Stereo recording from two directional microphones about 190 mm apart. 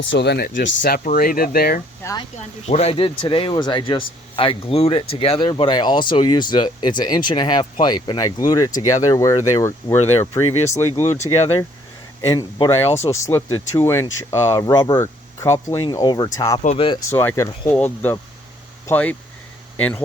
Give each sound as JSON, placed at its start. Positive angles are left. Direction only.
{"t": 0.0, "sound": "speech", "side_deg": 70}
{"t": 2.0, "sound": "speech", "side_deg": 15}
{"t": 2.6, "sound": "speech", "side_deg": 35}
{"t": 12.3, "sound": "speech", "side_deg": 20}
{"t": 17.1, "sound": "speech", "side_deg": 15}